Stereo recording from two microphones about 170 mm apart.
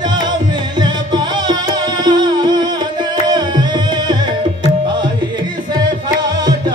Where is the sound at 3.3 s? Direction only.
25° right (ahead or behind).